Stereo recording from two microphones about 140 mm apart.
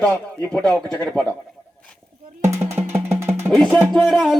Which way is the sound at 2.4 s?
20° right (ahead or behind).